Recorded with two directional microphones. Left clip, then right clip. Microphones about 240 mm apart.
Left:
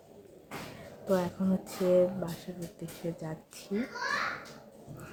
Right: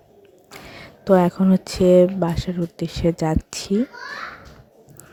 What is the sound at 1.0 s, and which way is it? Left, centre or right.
Speech, right.